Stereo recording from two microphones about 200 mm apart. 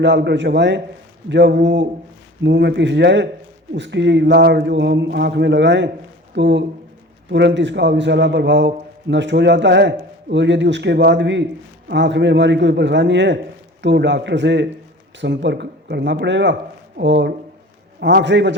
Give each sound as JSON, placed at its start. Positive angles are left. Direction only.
{"t": 0.0, "sound": "a man's voice", "side_deg": -60}